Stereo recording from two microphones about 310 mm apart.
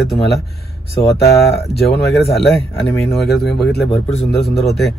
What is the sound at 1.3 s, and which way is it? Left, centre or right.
Speech, left.